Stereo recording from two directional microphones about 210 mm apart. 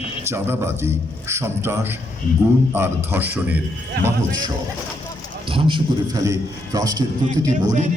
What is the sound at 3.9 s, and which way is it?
Speech, 50° right (ahead or behind).